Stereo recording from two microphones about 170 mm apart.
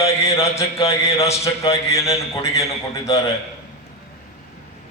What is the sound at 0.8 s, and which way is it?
A man's voice, 15° left (ahead or behind).